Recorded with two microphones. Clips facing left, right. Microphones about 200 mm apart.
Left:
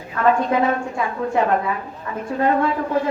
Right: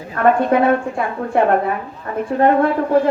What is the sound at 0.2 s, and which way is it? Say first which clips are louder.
A woman's voice: right 4 dB; 55° right (ahead or behind).